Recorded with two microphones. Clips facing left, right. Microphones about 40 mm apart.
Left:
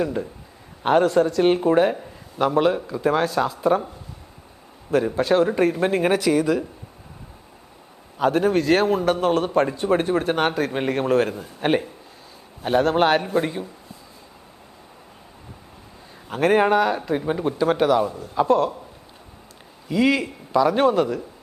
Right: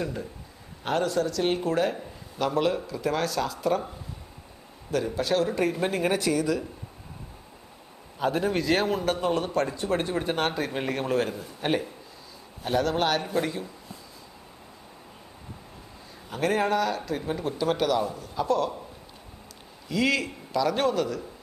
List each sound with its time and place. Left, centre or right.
0.0 s a man's voice: left
4.9 s a man's voice: left
8.2 s a man's voice: left
10.8 s a man's voice: left
16.3 s a man's voice: left
19.9 s speech: centre